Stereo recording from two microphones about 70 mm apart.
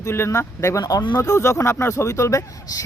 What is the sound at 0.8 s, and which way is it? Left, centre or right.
Speech, left.